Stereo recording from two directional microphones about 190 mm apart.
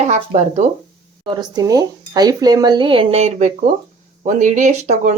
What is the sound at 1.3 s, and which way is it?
Speech, 20° right (ahead or behind).